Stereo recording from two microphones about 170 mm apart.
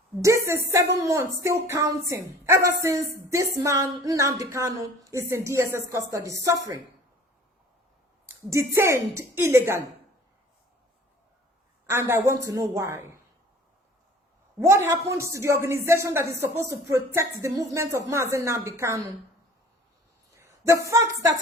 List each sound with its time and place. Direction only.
0.2 s a woman's voice: 15° right (ahead or behind)
8.3 s a woman's voice: 15° right (ahead or behind)
11.9 s a woman's voice: 15° right (ahead or behind)
14.6 s a woman's voice: 15° right (ahead or behind)
20.3 s a sound: 15° right (ahead or behind)